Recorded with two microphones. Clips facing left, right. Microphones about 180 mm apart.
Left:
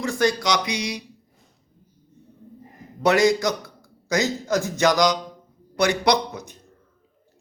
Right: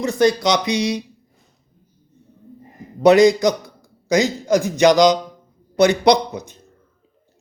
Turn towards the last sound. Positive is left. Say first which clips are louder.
# right 6 dB
turn(degrees=-20)  # may be behind; listen again after turning